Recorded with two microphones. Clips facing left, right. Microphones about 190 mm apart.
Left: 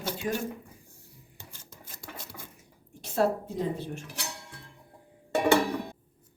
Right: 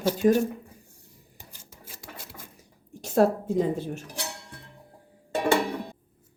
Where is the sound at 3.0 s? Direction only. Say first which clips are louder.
Right 5 dB; 50° right (ahead or behind).